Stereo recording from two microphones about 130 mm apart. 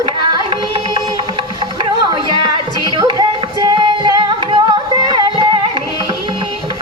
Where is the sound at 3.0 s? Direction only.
30° right (ahead or behind).